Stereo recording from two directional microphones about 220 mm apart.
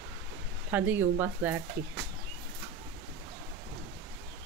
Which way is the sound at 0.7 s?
10° right (ahead or behind).